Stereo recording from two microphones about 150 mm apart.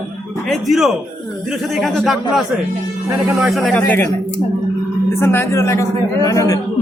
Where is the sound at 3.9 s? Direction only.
15° left (ahead or behind).